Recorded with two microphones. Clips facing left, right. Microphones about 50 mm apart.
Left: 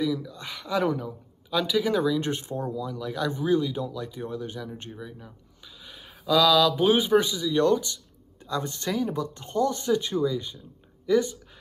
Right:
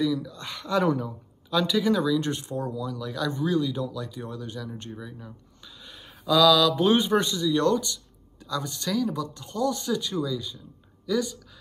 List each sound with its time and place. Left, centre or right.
0.0 s speech: centre
1.9 s speech: left
4.9 s speech: centre
8.5 s speech: left